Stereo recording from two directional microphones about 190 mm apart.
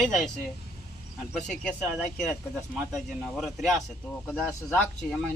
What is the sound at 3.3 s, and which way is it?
A woman's voice, centre (ahead or behind).